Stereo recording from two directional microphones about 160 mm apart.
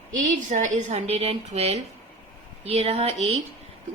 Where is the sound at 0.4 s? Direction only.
50° right (ahead or behind).